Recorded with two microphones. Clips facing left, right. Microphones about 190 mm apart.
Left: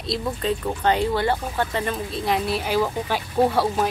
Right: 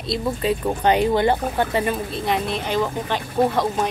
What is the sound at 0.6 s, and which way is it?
Speech, 15° right (ahead or behind).